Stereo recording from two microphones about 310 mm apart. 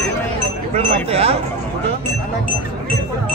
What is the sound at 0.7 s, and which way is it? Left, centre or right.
Speech, centre.